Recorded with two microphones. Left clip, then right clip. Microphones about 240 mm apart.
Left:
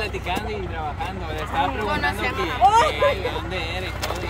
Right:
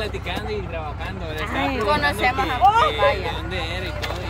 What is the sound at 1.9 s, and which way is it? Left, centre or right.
Speech, centre.